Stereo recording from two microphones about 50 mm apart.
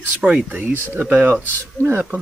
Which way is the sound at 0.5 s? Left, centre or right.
Right.